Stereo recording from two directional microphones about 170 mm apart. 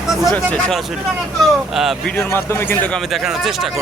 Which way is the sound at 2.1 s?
15° left (ahead or behind).